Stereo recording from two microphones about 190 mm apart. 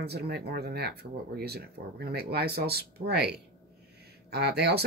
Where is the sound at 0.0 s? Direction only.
60° right (ahead or behind).